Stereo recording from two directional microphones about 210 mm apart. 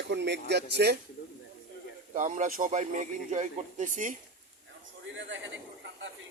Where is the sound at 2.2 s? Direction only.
35° right (ahead or behind).